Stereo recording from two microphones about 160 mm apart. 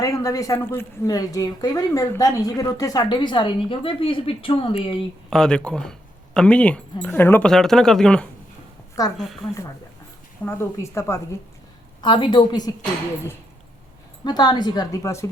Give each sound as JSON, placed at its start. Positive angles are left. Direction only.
{"t": 0.0, "sound": "speech", "side_deg": 20}
{"t": 5.3, "sound": "speech", "side_deg": 5}
{"t": 10.4, "sound": "speech", "side_deg": 15}
{"t": 12.0, "sound": "speech", "side_deg": 30}
{"t": 14.3, "sound": "speech", "side_deg": 25}